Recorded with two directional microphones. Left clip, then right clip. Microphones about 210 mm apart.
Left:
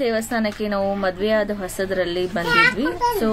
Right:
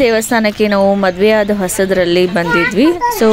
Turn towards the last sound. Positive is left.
turn(degrees=-35)  # may be behind; listen again after turning